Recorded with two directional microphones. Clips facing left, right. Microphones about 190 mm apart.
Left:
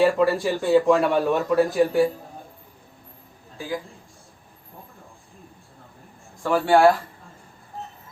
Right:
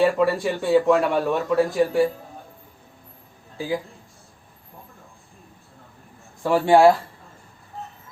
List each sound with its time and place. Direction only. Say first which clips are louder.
0.0 s speech: even; centre (ahead or behind)
6.4 s speech: right 2 dB; 20° right (ahead or behind)